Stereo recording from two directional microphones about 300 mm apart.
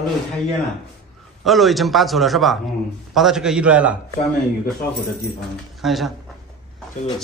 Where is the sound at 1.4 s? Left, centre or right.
Centre.